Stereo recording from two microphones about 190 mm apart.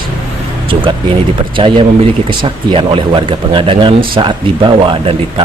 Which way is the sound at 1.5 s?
25° right (ahead or behind).